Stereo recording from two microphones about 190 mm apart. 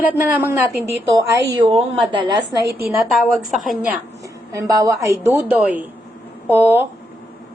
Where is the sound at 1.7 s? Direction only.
30° right (ahead or behind).